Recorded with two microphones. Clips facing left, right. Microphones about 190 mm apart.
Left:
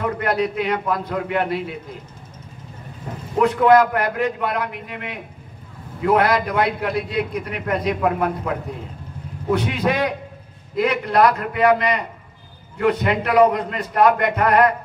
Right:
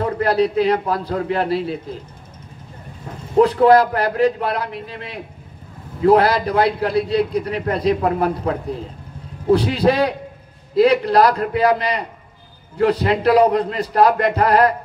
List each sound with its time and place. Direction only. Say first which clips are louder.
0.0 s a man's voice: right 4 dB; 35° right (ahead or behind)
3.3 s a man's voice: right 2 dB; 35° right (ahead or behind)